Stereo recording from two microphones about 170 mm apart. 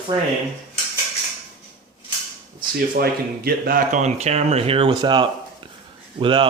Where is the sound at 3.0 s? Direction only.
60° right (ahead or behind); by 6.5 s 30° right (ahead or behind).